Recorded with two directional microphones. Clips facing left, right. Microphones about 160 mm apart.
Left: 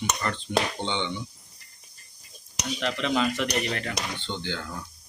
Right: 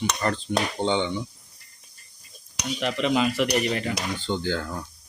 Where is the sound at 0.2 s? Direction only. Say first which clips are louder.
Right 2 dB; 40° right (ahead or behind).